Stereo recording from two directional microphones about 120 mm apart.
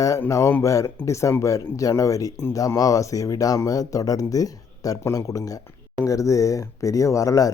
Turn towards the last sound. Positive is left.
turn(degrees=30)  # may be behind; listen again after turning